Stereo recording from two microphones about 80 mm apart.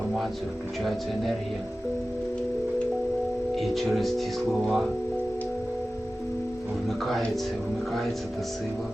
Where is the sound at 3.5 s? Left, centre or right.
Centre.